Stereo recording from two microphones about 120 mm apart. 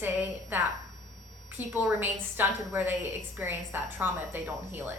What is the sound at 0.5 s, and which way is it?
A woman's voice, 15° right (ahead or behind).